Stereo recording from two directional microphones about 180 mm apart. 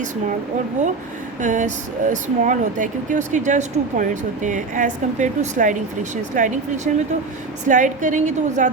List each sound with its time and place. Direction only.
1.4 s speech: 45° right (ahead or behind)